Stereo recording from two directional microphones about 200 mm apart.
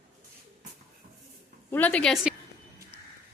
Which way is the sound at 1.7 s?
5° left (ahead or behind).